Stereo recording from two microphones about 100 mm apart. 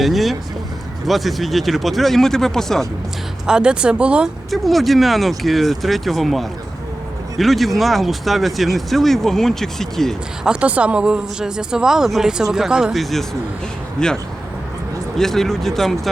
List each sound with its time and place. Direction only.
0.0 s speech: centre (ahead or behind)
3.4 s speech: 10° right (ahead or behind)
4.5 s speech: centre (ahead or behind)
10.4 s speech: 10° right (ahead or behind); by 14.1 s 5° left (ahead or behind)
15.2 s speech: 5° left (ahead or behind)